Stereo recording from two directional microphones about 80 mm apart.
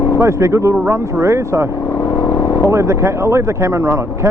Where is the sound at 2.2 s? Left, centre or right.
Left.